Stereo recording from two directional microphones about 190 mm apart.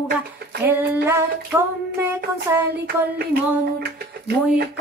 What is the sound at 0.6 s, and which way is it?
A woman's voice, 10° right (ahead or behind).